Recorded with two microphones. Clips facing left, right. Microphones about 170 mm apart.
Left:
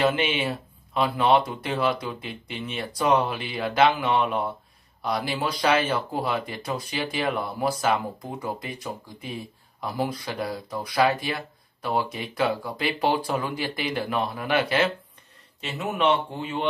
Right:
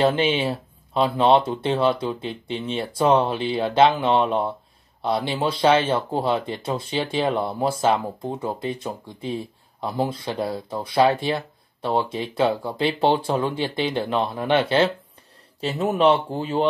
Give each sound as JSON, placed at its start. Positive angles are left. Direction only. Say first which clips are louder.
{"t": 0.0, "sound": "a man's voice", "louder": "right 4 dB", "side_deg": -30}